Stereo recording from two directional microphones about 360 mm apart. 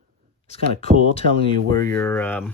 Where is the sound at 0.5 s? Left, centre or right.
Centre.